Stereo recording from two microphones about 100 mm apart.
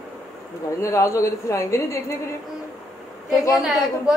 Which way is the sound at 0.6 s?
30° left (ahead or behind).